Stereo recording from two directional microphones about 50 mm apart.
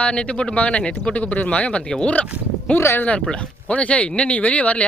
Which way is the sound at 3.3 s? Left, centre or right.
Left.